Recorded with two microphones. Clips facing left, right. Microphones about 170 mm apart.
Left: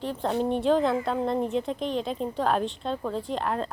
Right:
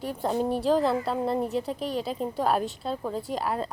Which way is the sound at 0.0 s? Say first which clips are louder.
Even; 10° right (ahead or behind).